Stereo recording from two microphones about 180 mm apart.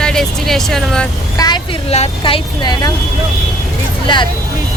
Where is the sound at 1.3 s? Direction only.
20° left (ahead or behind).